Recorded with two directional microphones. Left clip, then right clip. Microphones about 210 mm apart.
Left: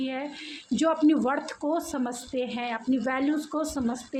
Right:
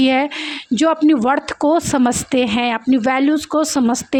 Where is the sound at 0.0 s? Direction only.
45° right (ahead or behind).